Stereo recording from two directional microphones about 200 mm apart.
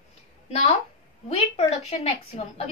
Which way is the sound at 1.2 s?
30° left (ahead or behind).